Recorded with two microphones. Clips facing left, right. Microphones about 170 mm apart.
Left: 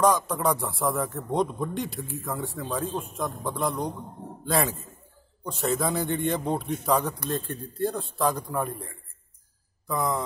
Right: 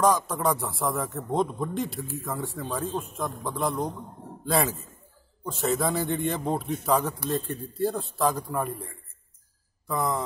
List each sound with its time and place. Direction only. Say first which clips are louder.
0.0 s a man's voice: left 1 dB; centre (ahead or behind)